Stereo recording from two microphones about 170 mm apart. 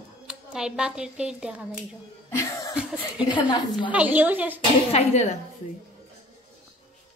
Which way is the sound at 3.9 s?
10° right (ahead or behind).